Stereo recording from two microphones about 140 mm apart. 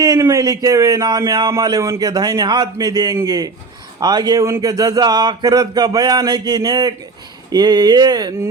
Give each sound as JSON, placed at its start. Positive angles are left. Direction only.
{"t": 0.0, "sound": "speech", "side_deg": -20}